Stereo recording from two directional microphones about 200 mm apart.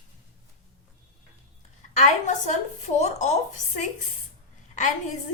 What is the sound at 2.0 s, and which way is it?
Speech, 40° left (ahead or behind).